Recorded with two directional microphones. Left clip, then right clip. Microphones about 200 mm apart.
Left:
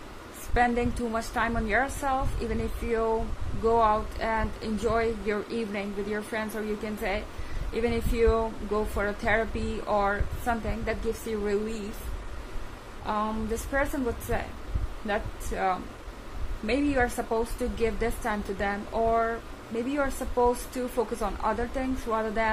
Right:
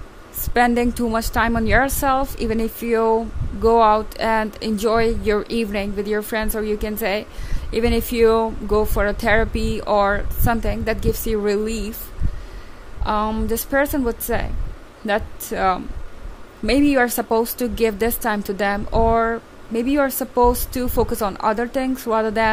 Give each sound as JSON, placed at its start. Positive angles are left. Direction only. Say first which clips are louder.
{"t": 0.6, "sound": "a woman's voice", "louder": "right 8 dB", "side_deg": -55}
{"t": 13.0, "sound": "a woman's voice", "louder": "right 8 dB", "side_deg": -55}